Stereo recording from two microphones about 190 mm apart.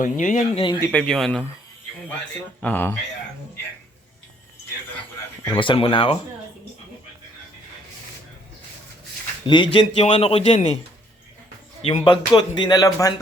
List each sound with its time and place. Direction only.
0.0 s speech: 45° left (ahead or behind)
0.8 s speech: 5° left (ahead or behind)
2.6 s speech: 10° left (ahead or behind)
5.5 s speech: 30° left (ahead or behind)
9.5 s a man's voice: 25° left (ahead or behind)
11.8 s speech: 30° left (ahead or behind)